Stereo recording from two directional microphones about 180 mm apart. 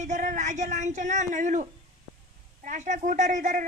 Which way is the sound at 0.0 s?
45° right (ahead or behind).